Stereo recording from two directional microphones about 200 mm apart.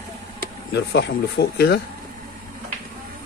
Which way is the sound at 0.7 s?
60° left (ahead or behind).